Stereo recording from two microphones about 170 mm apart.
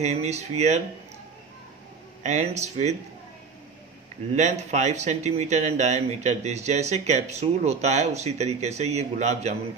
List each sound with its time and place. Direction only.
0.0 s speech: 40° right (ahead or behind)
2.2 s speech: 45° right (ahead or behind)
4.4 s speech: 45° right (ahead or behind)